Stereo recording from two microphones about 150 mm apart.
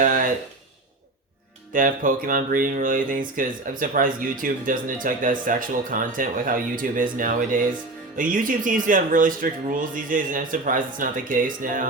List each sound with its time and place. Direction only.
0.0 s speech: 65° right (ahead or behind)
1.7 s speech: 65° right (ahead or behind)